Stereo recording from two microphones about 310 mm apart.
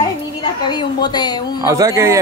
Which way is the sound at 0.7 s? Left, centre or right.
Centre.